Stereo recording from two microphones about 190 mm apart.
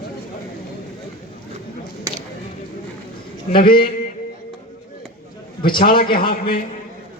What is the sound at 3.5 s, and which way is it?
Speech, 25° left (ahead or behind).